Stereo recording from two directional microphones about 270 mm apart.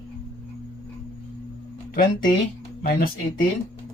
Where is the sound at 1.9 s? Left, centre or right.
Left.